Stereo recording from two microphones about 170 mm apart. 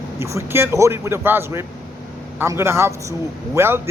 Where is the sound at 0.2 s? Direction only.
15° right (ahead or behind).